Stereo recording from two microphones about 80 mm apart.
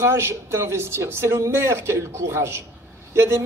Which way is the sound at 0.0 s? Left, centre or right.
Right.